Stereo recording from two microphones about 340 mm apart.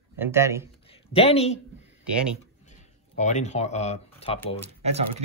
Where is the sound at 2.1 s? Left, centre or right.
Centre.